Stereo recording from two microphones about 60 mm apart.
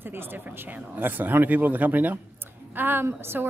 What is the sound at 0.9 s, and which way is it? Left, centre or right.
A woman's voice, right.